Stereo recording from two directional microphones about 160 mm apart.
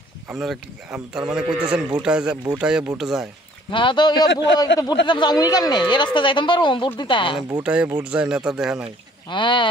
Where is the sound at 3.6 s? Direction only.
30° left (ahead or behind).